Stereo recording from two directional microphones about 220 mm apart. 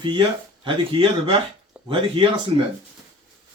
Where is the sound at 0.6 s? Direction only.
20° right (ahead or behind).